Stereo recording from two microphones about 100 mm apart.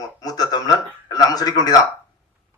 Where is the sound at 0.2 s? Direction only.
40° left (ahead or behind).